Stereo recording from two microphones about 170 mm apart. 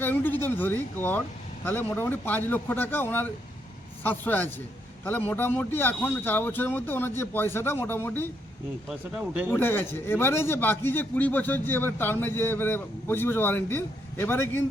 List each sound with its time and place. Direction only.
0.0 s a man's voice: 10° left (ahead or behind)
8.9 s speech: 5° right (ahead or behind)
9.5 s a man's voice: 15° left (ahead or behind)